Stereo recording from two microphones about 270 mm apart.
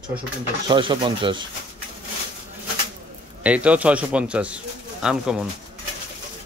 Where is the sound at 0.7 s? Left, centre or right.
Centre.